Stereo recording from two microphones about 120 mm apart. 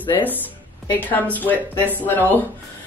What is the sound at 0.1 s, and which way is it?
Speech, 15° left (ahead or behind).